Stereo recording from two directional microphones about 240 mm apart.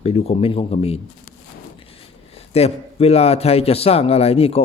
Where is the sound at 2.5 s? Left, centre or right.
Left.